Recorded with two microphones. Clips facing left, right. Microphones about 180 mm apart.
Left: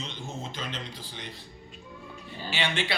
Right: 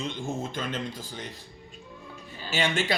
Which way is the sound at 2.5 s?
45° right (ahead or behind).